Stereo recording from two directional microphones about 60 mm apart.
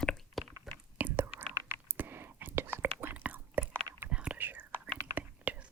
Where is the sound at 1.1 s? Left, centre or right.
Right.